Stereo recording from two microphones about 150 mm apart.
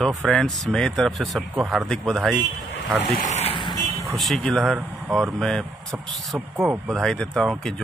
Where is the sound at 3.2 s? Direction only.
50° left (ahead or behind); by 4.0 s 25° left (ahead or behind).